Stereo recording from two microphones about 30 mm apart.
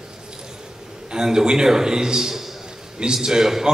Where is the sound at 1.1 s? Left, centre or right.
Right.